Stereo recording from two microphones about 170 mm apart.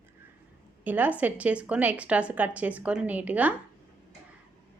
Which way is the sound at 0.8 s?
10° right (ahead or behind).